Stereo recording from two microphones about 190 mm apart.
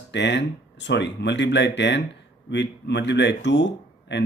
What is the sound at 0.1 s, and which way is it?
Speech, 65° left (ahead or behind).